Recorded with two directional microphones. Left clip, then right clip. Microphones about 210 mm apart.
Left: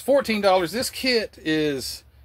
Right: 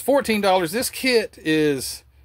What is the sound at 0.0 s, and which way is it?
Speech, 30° right (ahead or behind).